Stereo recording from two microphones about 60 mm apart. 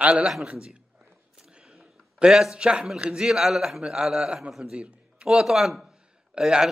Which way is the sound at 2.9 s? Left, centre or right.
Centre.